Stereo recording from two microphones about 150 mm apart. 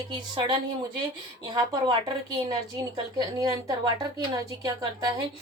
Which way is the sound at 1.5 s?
30° right (ahead or behind).